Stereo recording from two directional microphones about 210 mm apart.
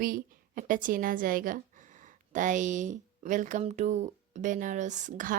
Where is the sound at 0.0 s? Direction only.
40° right (ahead or behind).